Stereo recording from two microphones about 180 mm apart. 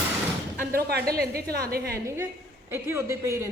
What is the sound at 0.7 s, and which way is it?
A woman's voice, 60° right (ahead or behind).